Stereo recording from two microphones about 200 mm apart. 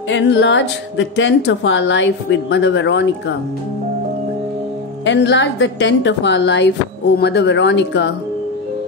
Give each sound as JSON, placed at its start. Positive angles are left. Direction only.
{"t": 0.1, "sound": "a woman's voice", "side_deg": 60}
{"t": 5.0, "sound": "a woman's voice", "side_deg": 65}